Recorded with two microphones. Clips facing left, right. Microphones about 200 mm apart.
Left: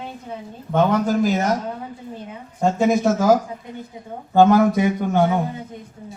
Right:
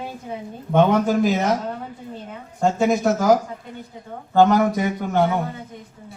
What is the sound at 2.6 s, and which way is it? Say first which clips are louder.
Speech: left 1 dB; centre (ahead or behind).